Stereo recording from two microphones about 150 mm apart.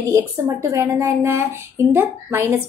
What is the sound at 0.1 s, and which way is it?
A woman's voice, 20° right (ahead or behind).